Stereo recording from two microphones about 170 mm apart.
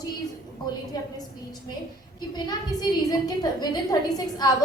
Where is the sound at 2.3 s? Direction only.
25° left (ahead or behind).